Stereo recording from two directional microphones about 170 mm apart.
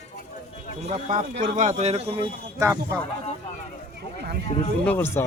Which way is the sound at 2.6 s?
15° right (ahead or behind).